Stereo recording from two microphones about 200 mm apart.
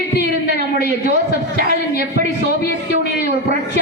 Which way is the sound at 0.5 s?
40° right (ahead or behind).